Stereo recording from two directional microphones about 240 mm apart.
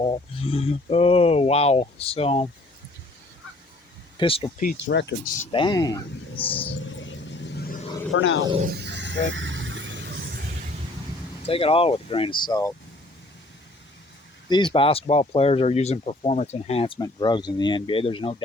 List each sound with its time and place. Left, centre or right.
0.0 s speech: left
4.2 s speech: left
4.6 s speech: left
5.4 s speech: left
6.9 s vehicle: left
8.1 s speech: left
8.4 s speech: centre
8.7 s a sound: right
11.4 s speech: left
14.5 s speech: left